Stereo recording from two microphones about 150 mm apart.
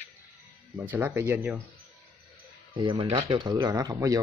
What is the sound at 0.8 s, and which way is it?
Speech, 10° right (ahead or behind).